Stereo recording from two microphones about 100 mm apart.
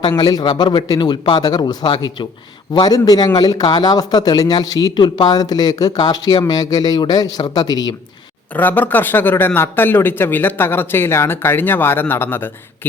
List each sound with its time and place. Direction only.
0.2 s a man's voice: 45° left (ahead or behind)
8.5 s speech: 20° left (ahead or behind)